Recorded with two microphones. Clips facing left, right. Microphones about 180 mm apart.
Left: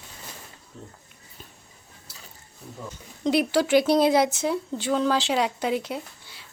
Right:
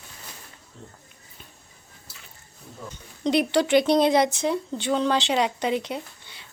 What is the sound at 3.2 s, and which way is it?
Speech, 5° left (ahead or behind).